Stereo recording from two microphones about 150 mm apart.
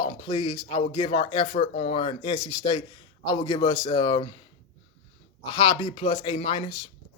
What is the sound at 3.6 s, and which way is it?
Speech, 25° left (ahead or behind).